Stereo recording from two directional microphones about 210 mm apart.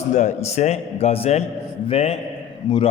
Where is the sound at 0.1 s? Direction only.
35° left (ahead or behind).